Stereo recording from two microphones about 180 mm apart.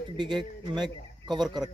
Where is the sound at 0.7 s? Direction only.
25° right (ahead or behind).